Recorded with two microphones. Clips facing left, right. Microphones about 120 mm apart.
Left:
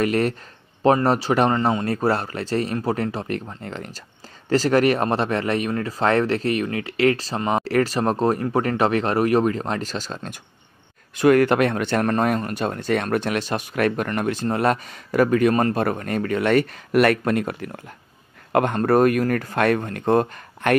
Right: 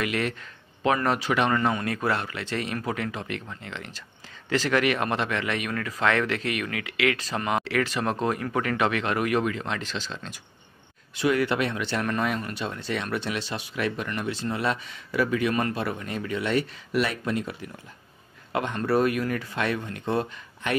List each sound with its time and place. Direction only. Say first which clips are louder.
0.0 s speech: left 7 dB; 40° left (ahead or behind)
1.5 s speech: left 4 dB; 25° left (ahead or behind); by 20.7 s 55° left (ahead or behind)